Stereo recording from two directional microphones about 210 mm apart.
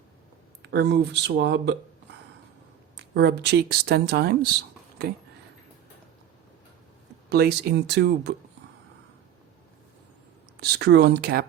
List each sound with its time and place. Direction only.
0.6 s speech: 55° right (ahead or behind)
3.0 s speech: 50° right (ahead or behind)
7.3 s speech: 50° right (ahead or behind)
10.6 s speech: 50° right (ahead or behind)